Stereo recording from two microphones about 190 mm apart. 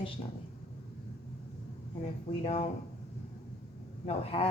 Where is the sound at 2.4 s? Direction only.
35° left (ahead or behind).